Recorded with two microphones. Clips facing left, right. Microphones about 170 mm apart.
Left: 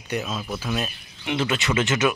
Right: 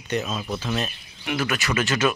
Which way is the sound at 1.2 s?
25° left (ahead or behind).